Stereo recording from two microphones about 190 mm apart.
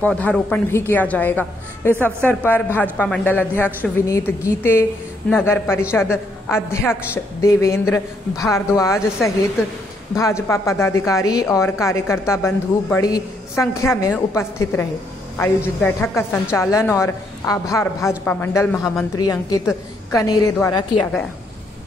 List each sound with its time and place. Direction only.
0.0 s speech: 5° left (ahead or behind)
10.1 s a woman's voice: 15° left (ahead or behind)